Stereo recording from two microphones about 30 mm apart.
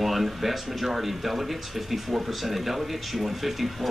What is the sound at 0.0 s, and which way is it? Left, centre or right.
Speech, centre.